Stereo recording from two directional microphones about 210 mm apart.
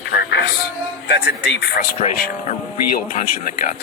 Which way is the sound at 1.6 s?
50° left (ahead or behind).